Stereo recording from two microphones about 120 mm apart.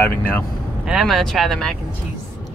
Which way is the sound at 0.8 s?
Centre (ahead or behind).